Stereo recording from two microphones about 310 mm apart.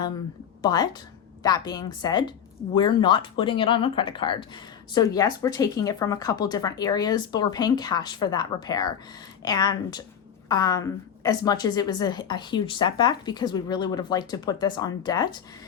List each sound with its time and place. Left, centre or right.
0.6 s a woman's voice: centre